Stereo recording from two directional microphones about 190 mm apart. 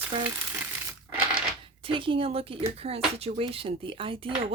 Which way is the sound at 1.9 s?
25° right (ahead or behind).